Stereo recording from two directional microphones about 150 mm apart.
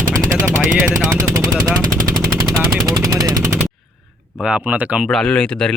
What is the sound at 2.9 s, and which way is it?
Speech, 25° right (ahead or behind).